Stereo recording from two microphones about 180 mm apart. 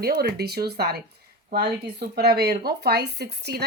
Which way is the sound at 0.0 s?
60° right (ahead or behind).